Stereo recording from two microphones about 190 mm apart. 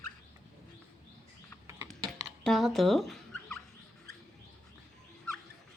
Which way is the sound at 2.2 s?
Centre (ahead or behind).